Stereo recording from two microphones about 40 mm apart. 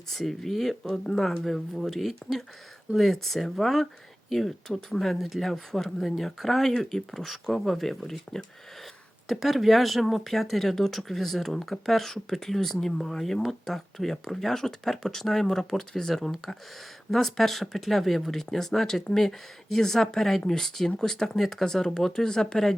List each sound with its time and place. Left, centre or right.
0.1 s speech: centre
9.3 s speech: centre